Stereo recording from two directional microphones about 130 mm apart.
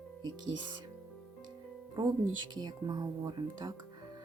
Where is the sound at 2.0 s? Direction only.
30° right (ahead or behind).